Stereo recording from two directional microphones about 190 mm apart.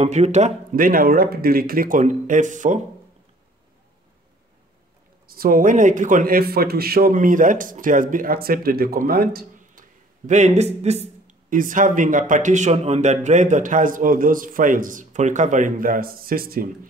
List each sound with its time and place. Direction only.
0.0 s a man's voice: 35° right (ahead or behind)
5.3 s a man's voice: 50° right (ahead or behind)